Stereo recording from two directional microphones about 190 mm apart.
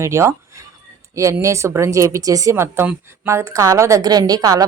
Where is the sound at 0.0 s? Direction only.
15° right (ahead or behind).